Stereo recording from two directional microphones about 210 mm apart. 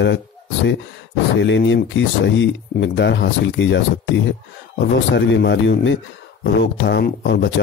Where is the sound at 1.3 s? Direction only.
60° left (ahead or behind).